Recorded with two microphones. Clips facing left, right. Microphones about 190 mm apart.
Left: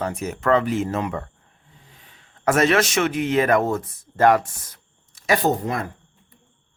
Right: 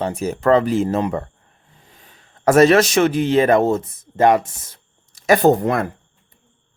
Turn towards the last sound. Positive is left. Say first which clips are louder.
# right 7 dB
turn(degrees=-60)  # may be behind; listen again after turning